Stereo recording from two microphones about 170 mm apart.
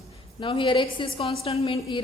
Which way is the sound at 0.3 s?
30° left (ahead or behind).